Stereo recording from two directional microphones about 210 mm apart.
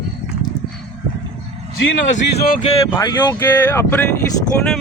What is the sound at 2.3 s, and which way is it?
Speech, 45° left (ahead or behind).